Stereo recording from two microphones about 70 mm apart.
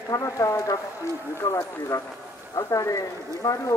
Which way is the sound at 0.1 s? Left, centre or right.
Left.